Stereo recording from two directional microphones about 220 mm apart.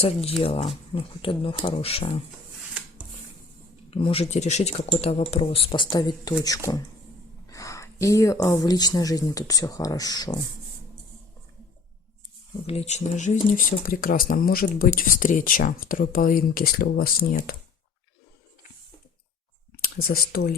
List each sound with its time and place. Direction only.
0.0 s speech: 25° left (ahead or behind)
3.9 s speech: 25° left (ahead or behind)
12.6 s speech: 30° left (ahead or behind)
20.1 s speech: 45° left (ahead or behind)